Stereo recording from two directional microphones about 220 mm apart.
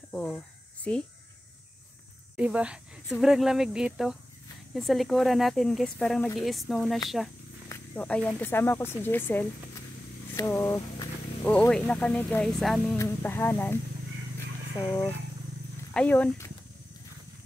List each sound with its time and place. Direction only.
0.1 s speech: 5° left (ahead or behind)
2.3 s speech: 5° right (ahead or behind); by 13.7 s 10° left (ahead or behind)
14.9 s speech: 10° left (ahead or behind)